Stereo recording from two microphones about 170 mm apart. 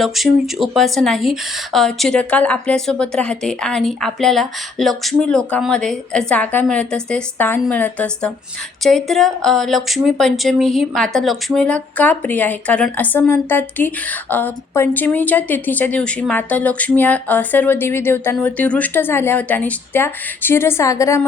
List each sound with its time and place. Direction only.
0.0 s speech: centre (ahead or behind); by 21.2 s 20° left (ahead or behind)